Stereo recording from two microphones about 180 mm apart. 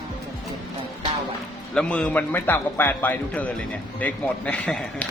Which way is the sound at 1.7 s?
5° left (ahead or behind).